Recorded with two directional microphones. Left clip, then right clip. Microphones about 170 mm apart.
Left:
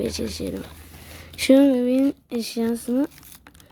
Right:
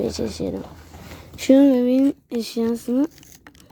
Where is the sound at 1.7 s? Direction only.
15° right (ahead or behind).